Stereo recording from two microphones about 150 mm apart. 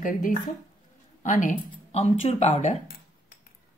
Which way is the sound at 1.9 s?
45° left (ahead or behind).